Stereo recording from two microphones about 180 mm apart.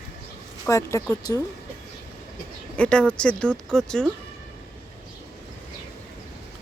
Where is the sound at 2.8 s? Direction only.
5° left (ahead or behind).